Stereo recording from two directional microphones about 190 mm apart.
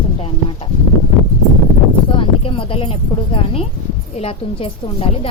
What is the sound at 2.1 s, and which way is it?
A woman's voice, 30° left (ahead or behind).